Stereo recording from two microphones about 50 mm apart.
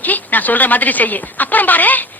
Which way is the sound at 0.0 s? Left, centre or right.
Left.